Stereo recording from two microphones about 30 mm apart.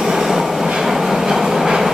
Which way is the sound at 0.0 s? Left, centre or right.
Centre.